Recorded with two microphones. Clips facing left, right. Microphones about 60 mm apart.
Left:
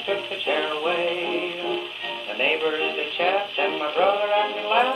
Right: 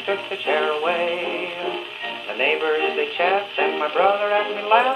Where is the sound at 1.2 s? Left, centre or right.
Right.